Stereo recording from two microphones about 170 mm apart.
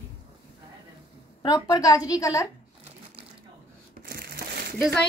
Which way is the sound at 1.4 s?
25° left (ahead or behind).